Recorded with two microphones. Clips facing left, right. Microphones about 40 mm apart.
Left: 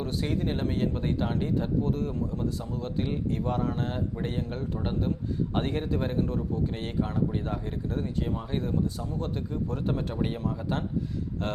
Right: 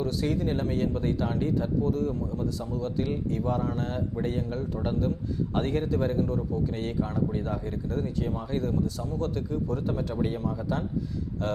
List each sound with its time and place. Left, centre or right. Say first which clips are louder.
0.0 s a man's voice: right 2 dB; left
1.8 s a man's voice: right 2 dB; left
9.6 s speech: right 1 dB; left